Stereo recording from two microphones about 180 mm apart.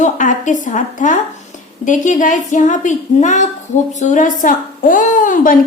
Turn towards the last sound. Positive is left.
turn(degrees=45)  # may be behind; listen again after turning